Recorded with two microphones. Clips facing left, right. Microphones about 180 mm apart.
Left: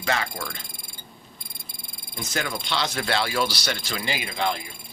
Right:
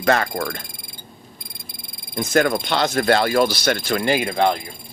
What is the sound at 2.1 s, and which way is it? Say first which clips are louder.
Speech: right 12 dB; 50° right (ahead or behind).